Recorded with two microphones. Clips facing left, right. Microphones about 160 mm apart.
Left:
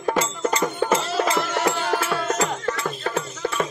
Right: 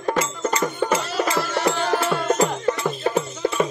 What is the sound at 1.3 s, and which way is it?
Music, 15° left (ahead or behind).